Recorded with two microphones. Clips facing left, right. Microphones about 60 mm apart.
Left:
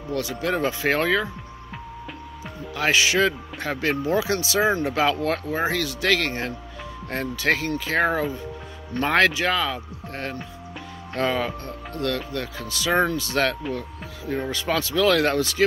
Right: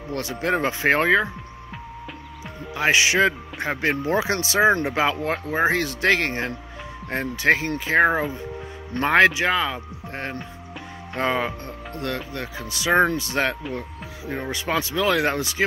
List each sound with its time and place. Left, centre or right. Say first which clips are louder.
0.1 s speech: right 1 dB; right
2.7 s speech: right 1 dB; right